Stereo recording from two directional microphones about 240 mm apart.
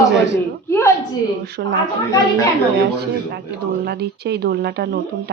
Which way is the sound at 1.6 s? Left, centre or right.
Right.